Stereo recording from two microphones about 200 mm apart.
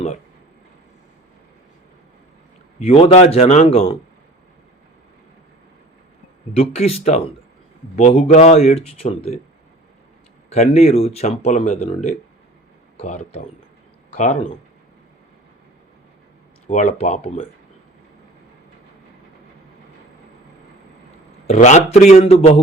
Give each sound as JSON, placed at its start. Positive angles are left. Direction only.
{"t": 2.7, "sound": "speech", "side_deg": 30}
{"t": 6.5, "sound": "speech", "side_deg": 30}
{"t": 10.5, "sound": "speech", "side_deg": 30}
{"t": 16.6, "sound": "speech", "side_deg": 35}
{"t": 21.4, "sound": "speech", "side_deg": 35}